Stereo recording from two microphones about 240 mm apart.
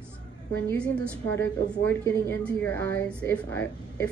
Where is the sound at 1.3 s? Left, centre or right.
Centre.